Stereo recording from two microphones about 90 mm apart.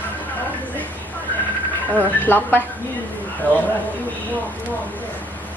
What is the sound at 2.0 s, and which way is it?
Speech, 20° left (ahead or behind).